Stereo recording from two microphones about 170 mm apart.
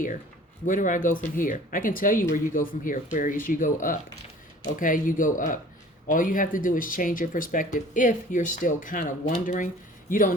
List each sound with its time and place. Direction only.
0.7 s speech: 50° left (ahead or behind)